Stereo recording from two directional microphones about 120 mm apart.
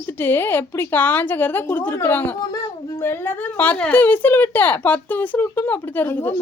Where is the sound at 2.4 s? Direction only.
30° left (ahead or behind).